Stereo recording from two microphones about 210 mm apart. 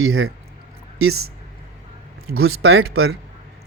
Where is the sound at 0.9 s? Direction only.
90° right.